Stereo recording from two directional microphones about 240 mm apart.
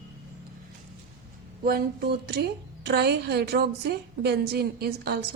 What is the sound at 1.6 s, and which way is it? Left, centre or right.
A woman's voice, right.